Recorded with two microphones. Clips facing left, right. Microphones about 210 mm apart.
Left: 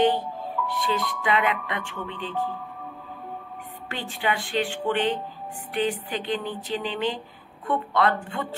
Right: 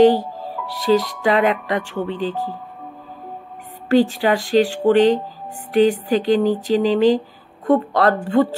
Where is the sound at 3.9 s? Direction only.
40° right (ahead or behind).